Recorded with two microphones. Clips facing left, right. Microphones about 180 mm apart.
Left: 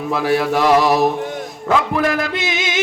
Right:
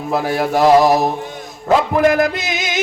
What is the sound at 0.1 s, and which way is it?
Mantra, 45° right (ahead or behind).